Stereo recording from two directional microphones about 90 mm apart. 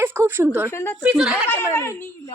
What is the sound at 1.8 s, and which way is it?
Speech, 30° left (ahead or behind).